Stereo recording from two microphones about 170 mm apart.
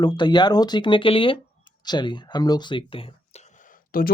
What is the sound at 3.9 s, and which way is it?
Speech, 60° left (ahead or behind).